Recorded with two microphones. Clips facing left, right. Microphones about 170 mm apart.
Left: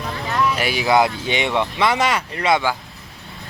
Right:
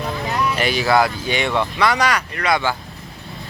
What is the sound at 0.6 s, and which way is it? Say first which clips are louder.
Speech: right 1 dB; 10° left (ahead or behind).